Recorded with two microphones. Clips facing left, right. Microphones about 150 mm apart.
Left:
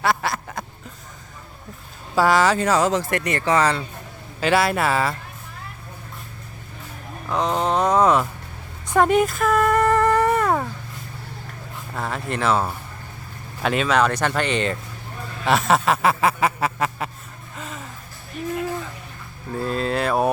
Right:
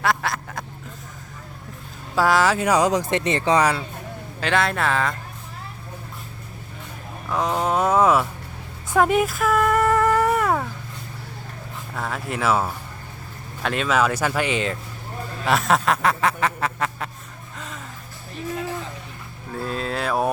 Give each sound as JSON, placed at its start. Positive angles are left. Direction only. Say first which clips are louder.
{"t": 0.0, "sound": "quack", "louder": "left 1 dB", "side_deg": 0}
{"t": 2.1, "sound": "speech", "louder": "left 1 dB", "side_deg": 0}
{"t": 2.6, "sound": "speech", "louder": "even", "side_deg": -15}
{"t": 4.4, "sound": "speech", "louder": "left 3 dB", "side_deg": 5}
{"t": 7.3, "sound": "a sound", "louder": "left 1 dB", "side_deg": 0}
{"t": 11.9, "sound": "speech", "louder": "left 1 dB", "side_deg": 0}
{"t": 15.4, "sound": "music", "louder": "left 1 dB", "side_deg": 0}
{"t": 17.6, "sound": "a sound", "louder": "left 2 dB", "side_deg": 5}
{"t": 19.5, "sound": "a sound", "louder": "left 4 dB", "side_deg": 0}